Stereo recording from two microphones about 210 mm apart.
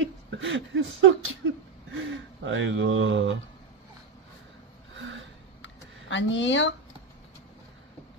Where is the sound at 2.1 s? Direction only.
65° right (ahead or behind).